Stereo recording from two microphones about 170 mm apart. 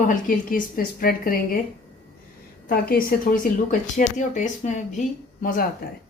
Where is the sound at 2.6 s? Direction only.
60° left (ahead or behind).